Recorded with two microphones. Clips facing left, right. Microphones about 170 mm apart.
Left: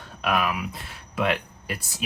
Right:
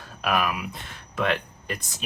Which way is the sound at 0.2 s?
Centre (ahead or behind).